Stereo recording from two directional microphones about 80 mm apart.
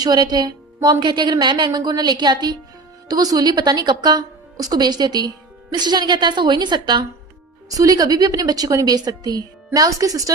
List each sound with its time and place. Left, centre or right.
0.0 s a woman's voice: right
3.1 s a woman's voice: right
7.7 s a woman's voice: right